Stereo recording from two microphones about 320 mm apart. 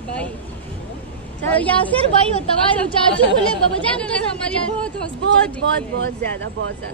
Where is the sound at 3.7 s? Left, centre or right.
Centre.